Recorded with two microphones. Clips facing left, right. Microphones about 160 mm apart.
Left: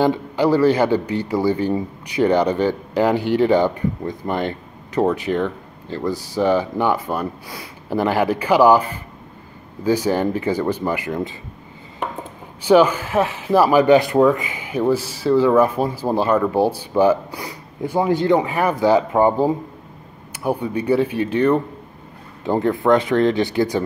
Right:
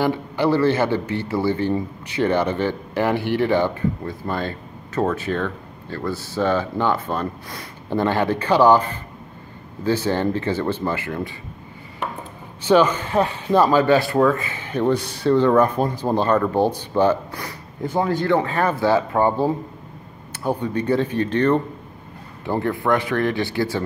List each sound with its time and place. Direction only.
0.0 s speech: 15° left (ahead or behind)
12.6 s speech: 10° left (ahead or behind)
22.4 s speech: 20° left (ahead or behind)